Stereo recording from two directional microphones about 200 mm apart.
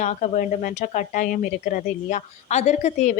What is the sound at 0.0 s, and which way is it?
Speech, 40° left (ahead or behind).